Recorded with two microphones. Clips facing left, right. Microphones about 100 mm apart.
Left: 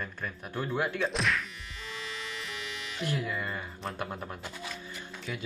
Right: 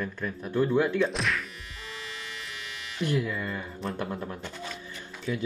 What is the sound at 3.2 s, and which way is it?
Speech, 25° left (ahead or behind).